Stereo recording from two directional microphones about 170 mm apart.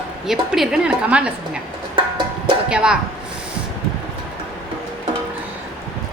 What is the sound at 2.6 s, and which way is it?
Speech, 5° right (ahead or behind).